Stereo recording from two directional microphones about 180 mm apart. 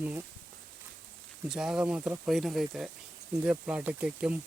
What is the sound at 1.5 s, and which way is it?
Speech, 5° right (ahead or behind).